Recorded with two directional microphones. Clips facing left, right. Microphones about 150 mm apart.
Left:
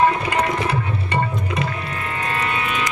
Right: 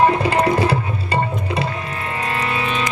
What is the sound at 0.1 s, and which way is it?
Tabla, 30° right (ahead or behind).